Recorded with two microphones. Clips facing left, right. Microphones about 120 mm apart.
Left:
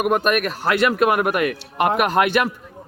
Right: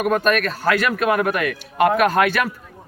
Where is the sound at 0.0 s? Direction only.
15° left (ahead or behind).